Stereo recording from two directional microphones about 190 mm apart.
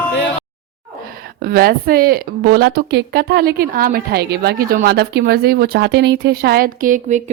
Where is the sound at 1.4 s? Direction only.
50° right (ahead or behind).